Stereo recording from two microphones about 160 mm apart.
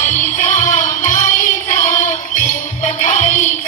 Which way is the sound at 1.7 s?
50° left (ahead or behind).